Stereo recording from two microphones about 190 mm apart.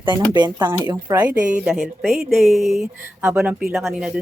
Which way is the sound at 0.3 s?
20° right (ahead or behind).